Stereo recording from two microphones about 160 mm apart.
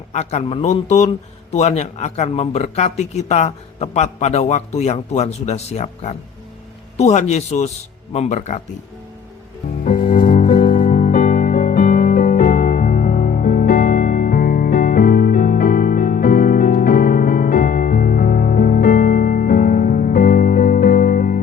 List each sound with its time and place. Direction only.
0.1 s speech: 45° left (ahead or behind)
10.2 s music: 60° left (ahead or behind)